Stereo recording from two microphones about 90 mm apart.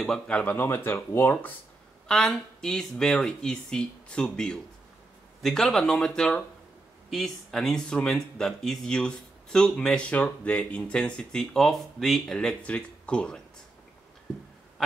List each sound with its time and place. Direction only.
0.0 s speech: 10° left (ahead or behind)
0.6 s speech: 25° left (ahead or behind)
2.0 s speech: 10° left (ahead or behind)